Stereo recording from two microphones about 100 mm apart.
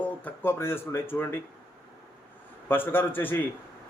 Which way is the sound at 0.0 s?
20° left (ahead or behind).